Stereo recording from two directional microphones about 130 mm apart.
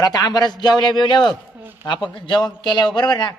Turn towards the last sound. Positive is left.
turn(degrees=35)  # may be behind; listen again after turning